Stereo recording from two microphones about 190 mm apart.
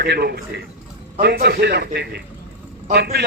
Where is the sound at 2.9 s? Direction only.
55° right (ahead or behind).